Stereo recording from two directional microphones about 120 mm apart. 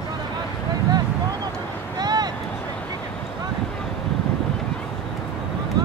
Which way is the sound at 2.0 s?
35° right (ahead or behind).